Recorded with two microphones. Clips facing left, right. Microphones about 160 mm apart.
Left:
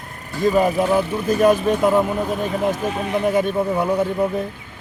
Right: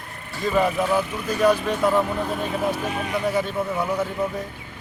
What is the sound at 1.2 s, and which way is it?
Speech, 45° left (ahead or behind).